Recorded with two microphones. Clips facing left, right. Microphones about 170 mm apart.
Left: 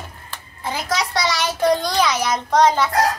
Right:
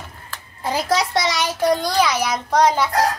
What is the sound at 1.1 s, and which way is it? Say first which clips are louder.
A child's voice: right 1 dB; 20° right (ahead or behind).